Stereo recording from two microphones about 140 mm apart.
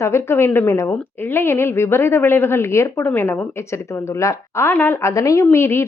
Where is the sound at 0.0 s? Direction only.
20° left (ahead or behind).